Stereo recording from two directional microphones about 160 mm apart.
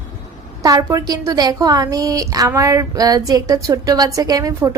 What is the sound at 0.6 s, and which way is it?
A woman's voice, 20° right (ahead or behind).